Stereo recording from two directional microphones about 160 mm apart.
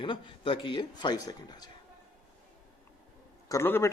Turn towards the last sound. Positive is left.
turn(degrees=15)  # may be behind; listen again after turning